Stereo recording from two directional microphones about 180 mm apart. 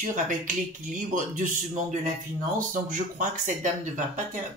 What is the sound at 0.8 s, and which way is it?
Speech, 45° right (ahead or behind).